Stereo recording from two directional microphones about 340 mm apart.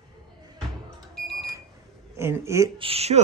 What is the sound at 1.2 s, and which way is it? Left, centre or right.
Smoke detector, centre.